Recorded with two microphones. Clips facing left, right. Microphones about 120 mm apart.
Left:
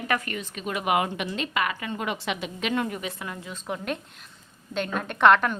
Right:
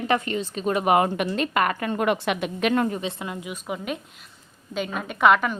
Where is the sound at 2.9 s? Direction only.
25° right (ahead or behind).